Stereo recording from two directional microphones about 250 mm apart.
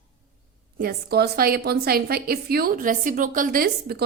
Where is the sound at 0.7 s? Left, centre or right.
Right.